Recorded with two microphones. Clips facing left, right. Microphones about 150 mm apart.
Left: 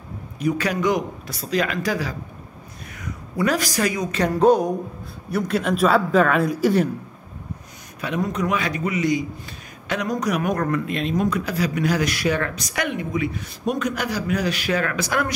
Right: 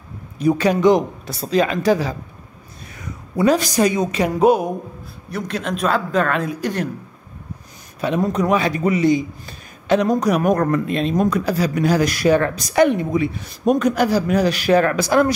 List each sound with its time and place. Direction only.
0.4 s speech: 25° right (ahead or behind)
4.1 s speech: 10° right (ahead or behind)
5.3 s speech: 5° left (ahead or behind)
8.0 s speech: 30° right (ahead or behind)